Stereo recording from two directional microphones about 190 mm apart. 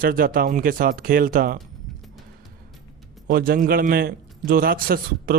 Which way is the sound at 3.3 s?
50° right (ahead or behind).